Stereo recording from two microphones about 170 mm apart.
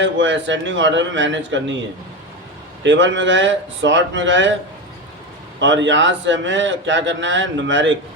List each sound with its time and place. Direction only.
0.0 s a man's voice: 90° right
2.8 s a man's voice: 90° right
5.5 s a man's voice: 90° right